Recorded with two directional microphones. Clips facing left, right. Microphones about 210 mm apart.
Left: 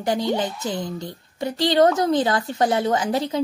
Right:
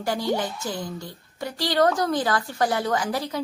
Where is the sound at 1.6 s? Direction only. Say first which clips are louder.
Left 4 dB; 25° left (ahead or behind).